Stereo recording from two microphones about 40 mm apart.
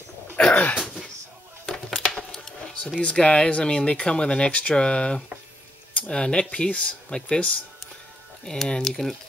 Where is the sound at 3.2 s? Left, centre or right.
Left.